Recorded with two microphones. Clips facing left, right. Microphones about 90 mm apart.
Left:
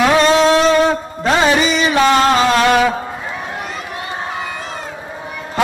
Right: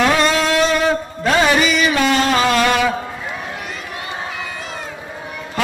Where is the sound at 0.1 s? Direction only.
25° left (ahead or behind).